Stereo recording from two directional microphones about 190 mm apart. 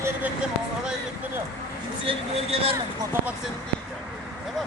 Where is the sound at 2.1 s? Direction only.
30° right (ahead or behind).